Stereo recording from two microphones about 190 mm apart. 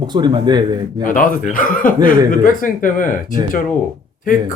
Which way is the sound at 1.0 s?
45° left (ahead or behind).